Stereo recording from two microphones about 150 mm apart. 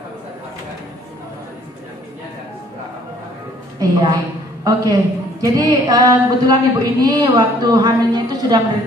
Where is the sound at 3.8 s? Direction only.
25° right (ahead or behind).